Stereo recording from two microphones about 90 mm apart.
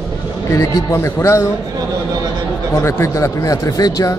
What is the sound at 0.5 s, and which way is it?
Speech, 35° left (ahead or behind).